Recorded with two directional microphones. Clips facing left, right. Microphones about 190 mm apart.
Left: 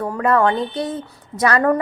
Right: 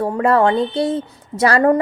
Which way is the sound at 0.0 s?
30° right (ahead or behind).